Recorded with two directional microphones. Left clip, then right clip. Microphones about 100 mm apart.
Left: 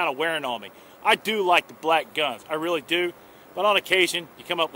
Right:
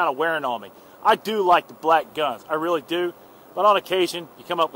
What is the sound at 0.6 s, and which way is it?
Speech, 55° left (ahead or behind).